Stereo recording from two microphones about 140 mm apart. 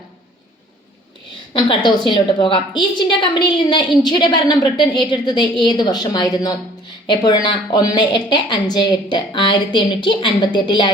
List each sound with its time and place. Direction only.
1.5 s a woman's voice: 35° left (ahead or behind)